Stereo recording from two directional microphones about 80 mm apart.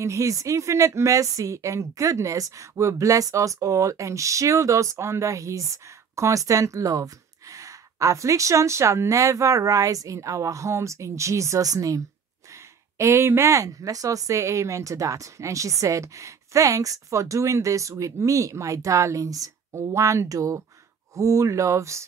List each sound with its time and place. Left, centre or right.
0.0 s a woman's voice: right
12.9 s a woman's voice: right